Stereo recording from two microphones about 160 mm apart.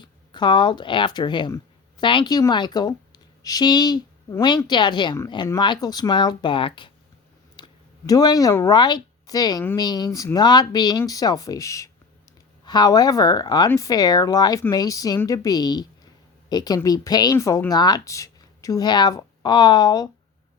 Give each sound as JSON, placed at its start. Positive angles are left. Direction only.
{"t": 0.0, "sound": "speech", "side_deg": 30}